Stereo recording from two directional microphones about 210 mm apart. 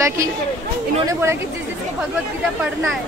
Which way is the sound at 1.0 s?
10° right (ahead or behind).